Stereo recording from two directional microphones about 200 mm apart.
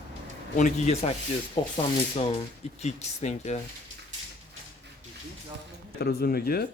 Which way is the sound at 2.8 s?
35° left (ahead or behind).